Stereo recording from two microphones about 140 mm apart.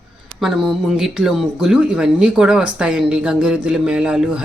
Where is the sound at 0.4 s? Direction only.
Centre (ahead or behind).